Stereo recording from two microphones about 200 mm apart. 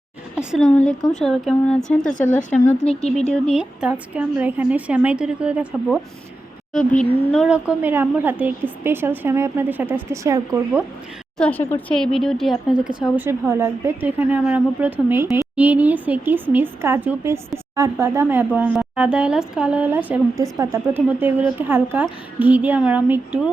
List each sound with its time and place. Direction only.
0.3 s a woman's voice: centre (ahead or behind)
2.7 s speech: 30° left (ahead or behind)
3.4 s a woman's voice: 5° right (ahead or behind)
6.7 s a woman's voice: 5° left (ahead or behind)
7.4 s a woman's voice: 5° right (ahead or behind)
11.3 s a woman's voice: 5° left (ahead or behind); by 23.4 s 10° right (ahead or behind)